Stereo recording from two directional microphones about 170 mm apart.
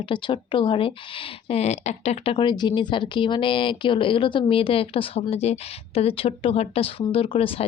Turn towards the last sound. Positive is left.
turn(degrees=35)  # may be behind; listen again after turning